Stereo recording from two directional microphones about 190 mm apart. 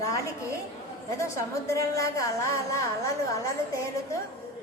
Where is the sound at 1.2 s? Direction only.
15° left (ahead or behind).